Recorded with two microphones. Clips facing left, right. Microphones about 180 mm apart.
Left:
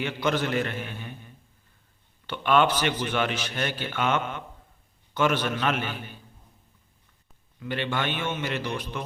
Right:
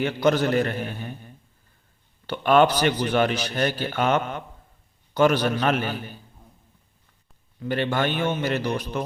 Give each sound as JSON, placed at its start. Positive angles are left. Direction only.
{"t": 0.0, "sound": "a man's voice", "side_deg": -40}
{"t": 7.6, "sound": "a man's voice", "side_deg": -40}